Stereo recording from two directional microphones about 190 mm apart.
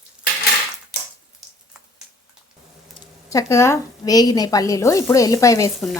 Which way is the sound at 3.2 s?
15° left (ahead or behind).